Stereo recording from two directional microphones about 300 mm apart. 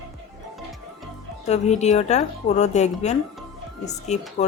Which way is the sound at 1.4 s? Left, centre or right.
Left.